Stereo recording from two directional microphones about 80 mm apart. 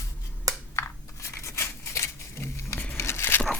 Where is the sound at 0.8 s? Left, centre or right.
Left.